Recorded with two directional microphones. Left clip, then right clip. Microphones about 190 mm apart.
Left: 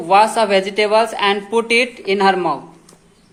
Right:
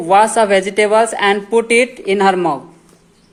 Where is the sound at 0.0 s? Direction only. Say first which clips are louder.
Right 2 dB; 30° right (ahead or behind).